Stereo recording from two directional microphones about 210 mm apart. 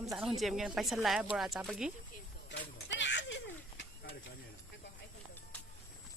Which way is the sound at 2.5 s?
60° left (ahead or behind).